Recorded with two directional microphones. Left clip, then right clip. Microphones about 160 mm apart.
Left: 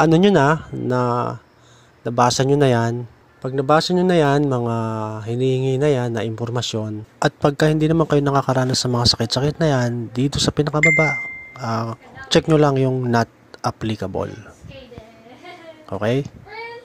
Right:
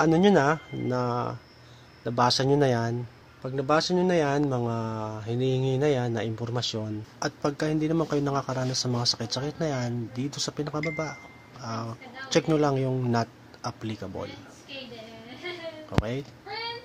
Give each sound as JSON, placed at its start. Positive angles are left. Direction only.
{"t": 0.0, "sound": "speech", "side_deg": 45}
{"t": 15.9, "sound": "speech", "side_deg": 50}